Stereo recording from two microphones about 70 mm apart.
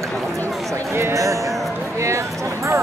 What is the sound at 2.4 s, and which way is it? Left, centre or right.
Music, right.